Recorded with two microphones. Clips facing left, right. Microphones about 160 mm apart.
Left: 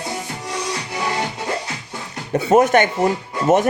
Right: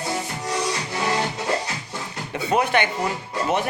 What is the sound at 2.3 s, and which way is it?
A man's voice, 45° left (ahead or behind).